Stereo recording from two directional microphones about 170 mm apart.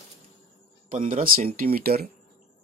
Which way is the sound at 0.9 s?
50° right (ahead or behind).